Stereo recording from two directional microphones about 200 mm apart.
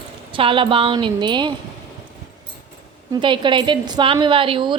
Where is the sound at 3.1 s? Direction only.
25° right (ahead or behind).